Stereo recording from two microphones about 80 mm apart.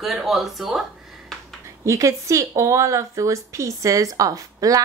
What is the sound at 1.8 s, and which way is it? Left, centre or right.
Speech, right.